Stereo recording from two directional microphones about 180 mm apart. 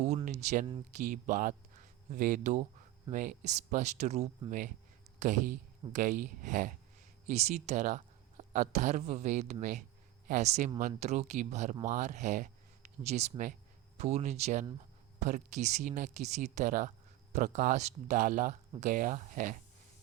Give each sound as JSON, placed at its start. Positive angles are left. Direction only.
{"t": 0.3, "sound": "speech", "side_deg": -40}